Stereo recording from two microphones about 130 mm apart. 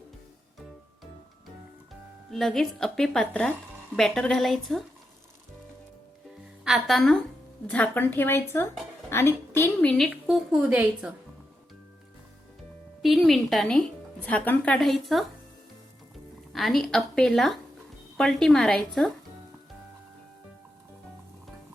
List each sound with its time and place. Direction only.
2.3 s a woman's voice: centre (ahead or behind)
6.7 s a woman's voice: centre (ahead or behind)
7.7 s a woman's voice: 15° left (ahead or behind)
9.9 s a woman's voice: 5° left (ahead or behind)
13.0 s a woman's voice: centre (ahead or behind)
14.8 s a woman's voice: centre (ahead or behind)
16.5 s a woman's voice: centre (ahead or behind)